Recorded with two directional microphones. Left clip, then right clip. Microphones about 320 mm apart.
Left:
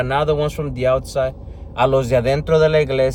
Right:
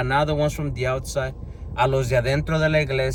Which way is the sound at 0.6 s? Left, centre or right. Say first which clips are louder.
Left 7 dB; left.